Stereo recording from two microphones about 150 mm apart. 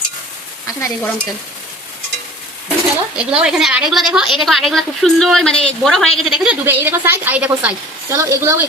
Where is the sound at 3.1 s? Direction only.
5° right (ahead or behind).